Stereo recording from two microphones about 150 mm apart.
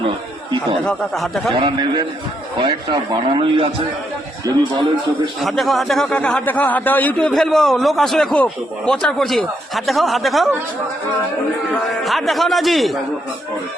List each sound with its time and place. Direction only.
0.9 s a man's voice: centre (ahead or behind)
1.6 s a man's voice: 30° right (ahead or behind)
5.4 s a man's voice: centre (ahead or behind)
11.7 s a man's voice: centre (ahead or behind)